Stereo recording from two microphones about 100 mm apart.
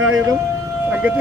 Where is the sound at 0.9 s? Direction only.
15° right (ahead or behind).